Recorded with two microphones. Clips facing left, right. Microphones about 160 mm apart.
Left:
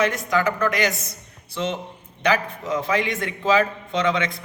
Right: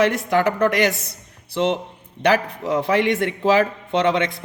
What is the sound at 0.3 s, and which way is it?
A man's voice, 65° right (ahead or behind).